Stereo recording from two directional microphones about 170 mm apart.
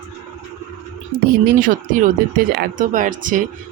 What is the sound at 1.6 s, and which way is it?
Speech, 55° right (ahead or behind).